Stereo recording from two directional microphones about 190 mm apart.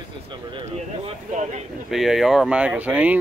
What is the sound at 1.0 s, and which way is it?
Speech, 35° right (ahead or behind).